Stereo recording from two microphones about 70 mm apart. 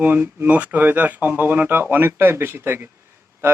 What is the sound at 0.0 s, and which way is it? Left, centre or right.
A man's voice, right.